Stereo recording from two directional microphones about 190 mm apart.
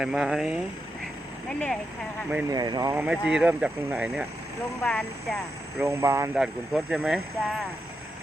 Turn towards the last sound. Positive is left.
turn(degrees=0)  # may be behind; listen again after turning